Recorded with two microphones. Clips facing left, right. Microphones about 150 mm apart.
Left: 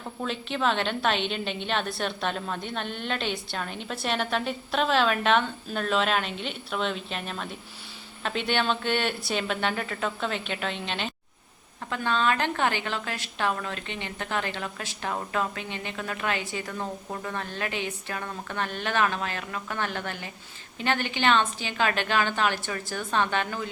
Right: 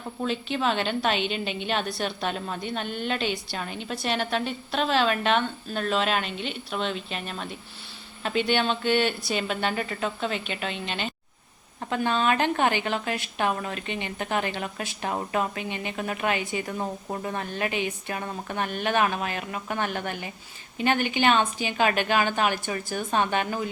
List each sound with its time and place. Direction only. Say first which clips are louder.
0.2 s a woman's voice: right 2 dB; centre (ahead or behind)
11.9 s a woman's voice: right 2 dB; 15° right (ahead or behind)